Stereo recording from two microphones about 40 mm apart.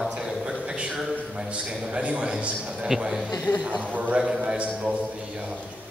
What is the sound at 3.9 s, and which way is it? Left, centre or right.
Speech, right.